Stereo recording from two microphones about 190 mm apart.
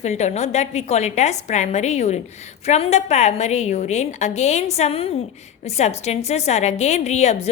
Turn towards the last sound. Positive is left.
turn(degrees=35)  # may be behind; listen again after turning